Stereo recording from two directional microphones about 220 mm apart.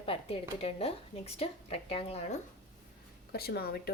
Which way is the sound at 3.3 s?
45° left (ahead or behind).